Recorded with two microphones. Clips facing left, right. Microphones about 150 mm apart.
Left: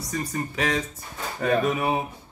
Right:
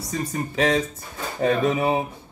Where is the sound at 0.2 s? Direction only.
25° right (ahead or behind).